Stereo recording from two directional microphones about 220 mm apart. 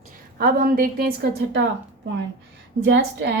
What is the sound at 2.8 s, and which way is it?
Speech, 55° right (ahead or behind).